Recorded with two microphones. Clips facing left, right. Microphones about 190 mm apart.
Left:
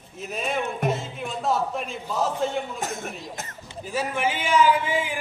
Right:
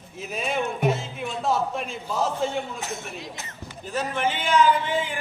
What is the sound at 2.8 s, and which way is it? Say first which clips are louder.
Speech: left 3 dB; 50° left (ahead or behind).